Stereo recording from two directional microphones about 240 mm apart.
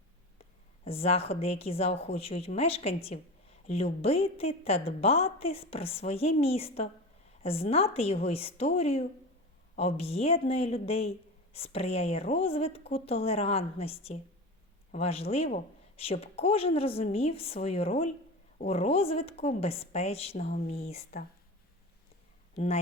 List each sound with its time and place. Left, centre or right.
0.9 s a woman's voice: left
22.5 s a woman's voice: left